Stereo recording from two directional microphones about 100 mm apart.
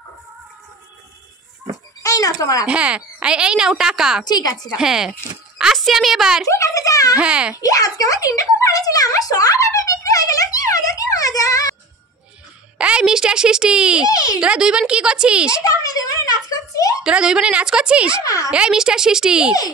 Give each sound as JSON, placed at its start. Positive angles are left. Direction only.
{"t": 2.0, "sound": "speech", "side_deg": 35}
{"t": 2.6, "sound": "speech", "side_deg": -10}
{"t": 4.3, "sound": "speech", "side_deg": 40}
{"t": 4.7, "sound": "a child's voice", "side_deg": -5}
{"t": 6.5, "sound": "a sound", "side_deg": 30}
{"t": 7.2, "sound": "speech", "side_deg": -10}
{"t": 7.5, "sound": "a sound", "side_deg": 35}
{"t": 12.7, "sound": "a woman's voice", "side_deg": -10}
{"t": 14.0, "sound": "speech", "side_deg": 35}
{"t": 14.4, "sound": "speech", "side_deg": -10}
{"t": 15.6, "sound": "a sound", "side_deg": 35}
{"t": 17.0, "sound": "speech", "side_deg": -10}
{"t": 18.2, "sound": "speech", "side_deg": 35}
{"t": 18.5, "sound": "speech", "side_deg": -10}